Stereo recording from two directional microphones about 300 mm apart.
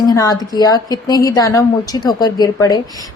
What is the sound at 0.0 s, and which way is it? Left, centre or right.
A woman's voice, centre.